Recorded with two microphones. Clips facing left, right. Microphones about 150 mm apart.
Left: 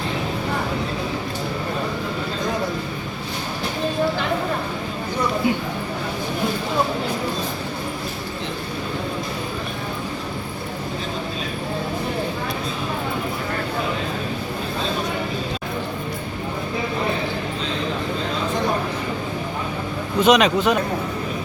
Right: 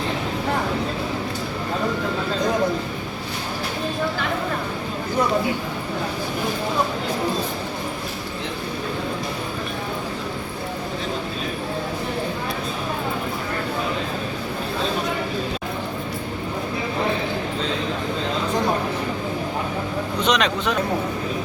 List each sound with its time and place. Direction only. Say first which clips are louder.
20.2 s speech: left 6 dB; 5° left (ahead or behind)